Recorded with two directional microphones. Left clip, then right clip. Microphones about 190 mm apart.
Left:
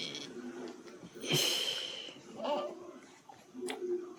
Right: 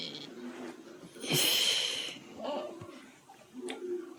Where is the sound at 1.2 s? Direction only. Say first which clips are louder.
Right 4 dB; 10° right (ahead or behind).